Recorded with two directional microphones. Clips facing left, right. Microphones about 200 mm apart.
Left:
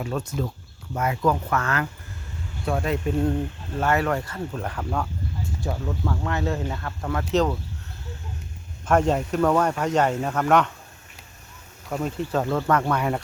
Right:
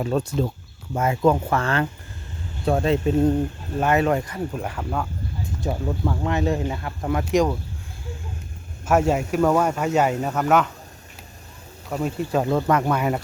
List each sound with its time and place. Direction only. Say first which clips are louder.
0.0 s speech: right 5 dB; 35° right (ahead or behind); by 5.0 s 5° right (ahead or behind)
5.5 s speech: right 4 dB; 20° right (ahead or behind)
8.9 s speech: right 1 dB; 10° right (ahead or behind)
11.9 s speech: right 2 dB; 10° right (ahead or behind)